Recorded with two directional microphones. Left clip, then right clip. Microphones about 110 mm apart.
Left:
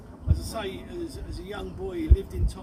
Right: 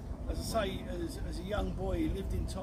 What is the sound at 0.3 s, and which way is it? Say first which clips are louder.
Speech: even; 45° right (ahead or behind).